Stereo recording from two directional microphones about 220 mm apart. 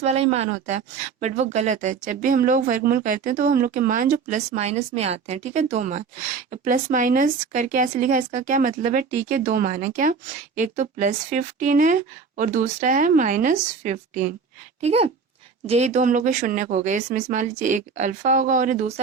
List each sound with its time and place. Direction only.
0.0 s speech: 30° right (ahead or behind)